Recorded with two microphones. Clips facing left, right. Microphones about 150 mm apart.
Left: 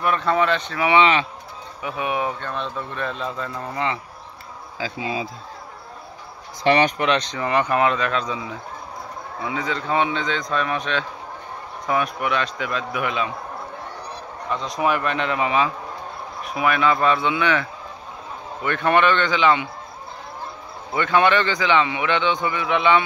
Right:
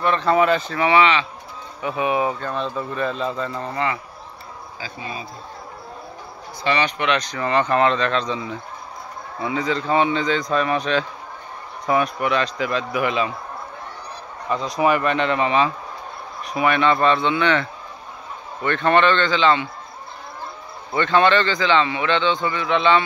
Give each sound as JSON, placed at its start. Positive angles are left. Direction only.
{"t": 0.0, "sound": "speech", "side_deg": 5}
{"t": 3.7, "sound": "speech", "side_deg": 20}
{"t": 4.7, "sound": "speech", "side_deg": 90}
{"t": 6.6, "sound": "speech", "side_deg": 60}
{"t": 7.0, "sound": "a man's voice", "side_deg": 30}
{"t": 14.5, "sound": "a man's voice", "side_deg": 0}
{"t": 20.9, "sound": "a man's voice", "side_deg": 10}